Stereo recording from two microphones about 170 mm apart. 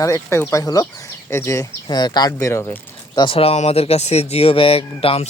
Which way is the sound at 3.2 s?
35° left (ahead or behind).